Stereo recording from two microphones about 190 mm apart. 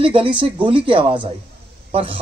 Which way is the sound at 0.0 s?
25° right (ahead or behind).